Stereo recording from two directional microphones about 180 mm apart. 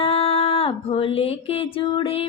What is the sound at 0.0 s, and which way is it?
Music, 30° left (ahead or behind).